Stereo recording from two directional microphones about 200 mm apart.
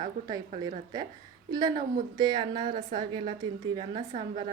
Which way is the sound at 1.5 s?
20° right (ahead or behind).